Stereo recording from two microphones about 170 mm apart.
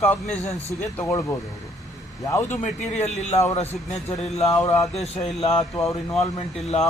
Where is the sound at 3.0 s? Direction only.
40° left (ahead or behind).